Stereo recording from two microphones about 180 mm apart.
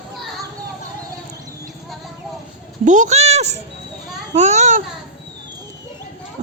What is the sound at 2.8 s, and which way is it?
Speech, 40° right (ahead or behind).